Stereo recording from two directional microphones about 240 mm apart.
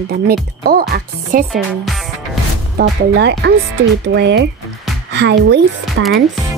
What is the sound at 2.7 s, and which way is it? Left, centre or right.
Speech, right.